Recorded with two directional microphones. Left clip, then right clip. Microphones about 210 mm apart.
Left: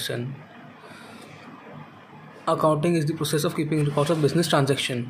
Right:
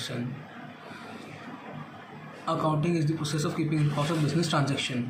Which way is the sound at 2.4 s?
55° left (ahead or behind).